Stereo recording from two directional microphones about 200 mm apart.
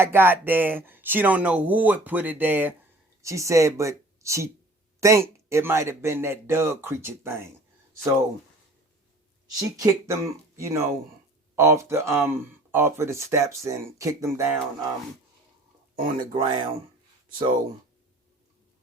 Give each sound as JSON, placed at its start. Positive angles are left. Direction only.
{"t": 0.0, "sound": "speech", "side_deg": -10}
{"t": 9.6, "sound": "speech", "side_deg": -15}
{"t": 16.0, "sound": "speech", "side_deg": -45}
{"t": 16.3, "sound": "speech", "side_deg": -25}